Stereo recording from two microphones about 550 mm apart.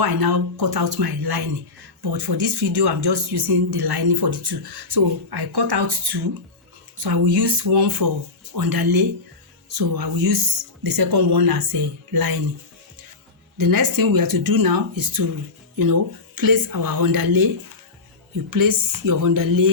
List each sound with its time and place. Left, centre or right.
0.0 s speech: right
13.6 s speech: right
18.5 s speech: right